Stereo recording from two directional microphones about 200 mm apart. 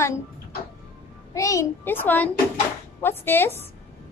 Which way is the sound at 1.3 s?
15° left (ahead or behind).